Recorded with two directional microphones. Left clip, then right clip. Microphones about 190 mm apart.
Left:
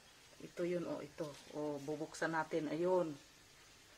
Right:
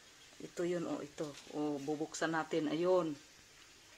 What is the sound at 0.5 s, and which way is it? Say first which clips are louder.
Speech: right 2 dB; 50° right (ahead or behind).